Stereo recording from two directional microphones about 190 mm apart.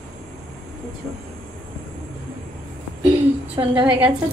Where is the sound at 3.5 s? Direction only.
25° right (ahead or behind).